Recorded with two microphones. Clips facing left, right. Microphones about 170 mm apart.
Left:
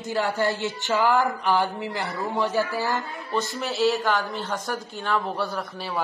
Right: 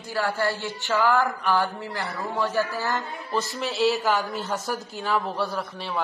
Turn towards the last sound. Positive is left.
turn(degrees=0)  # may be behind; listen again after turning